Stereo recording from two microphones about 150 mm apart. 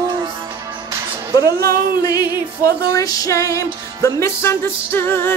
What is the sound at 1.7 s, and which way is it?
Music, 25° left (ahead or behind).